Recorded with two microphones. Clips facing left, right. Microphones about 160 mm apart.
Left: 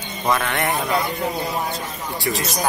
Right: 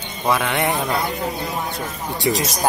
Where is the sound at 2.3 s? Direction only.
20° right (ahead or behind).